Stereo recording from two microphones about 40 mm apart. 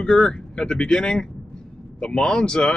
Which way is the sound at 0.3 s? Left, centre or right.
Centre.